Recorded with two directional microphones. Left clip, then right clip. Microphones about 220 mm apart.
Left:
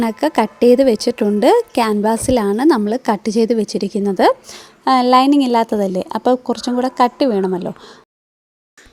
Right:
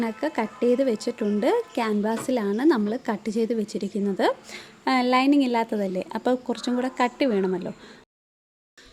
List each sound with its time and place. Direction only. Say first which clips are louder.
0.0 s a woman's voice: left 11 dB; 35° left (ahead or behind)